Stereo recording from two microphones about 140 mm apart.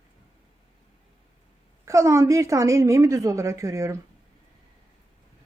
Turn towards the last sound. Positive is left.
turn(degrees=-20)  # may be behind; listen again after turning